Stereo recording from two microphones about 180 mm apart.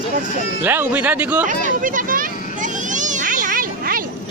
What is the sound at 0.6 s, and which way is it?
Speech, 10° right (ahead or behind).